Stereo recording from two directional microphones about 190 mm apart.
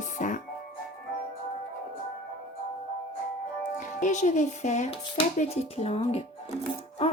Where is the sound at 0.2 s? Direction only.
40° left (ahead or behind).